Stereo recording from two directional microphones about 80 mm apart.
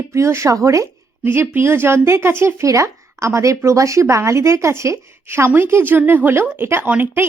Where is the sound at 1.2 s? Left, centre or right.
Right.